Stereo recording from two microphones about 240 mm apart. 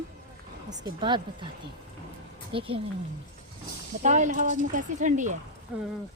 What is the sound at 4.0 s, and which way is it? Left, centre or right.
Speech, right.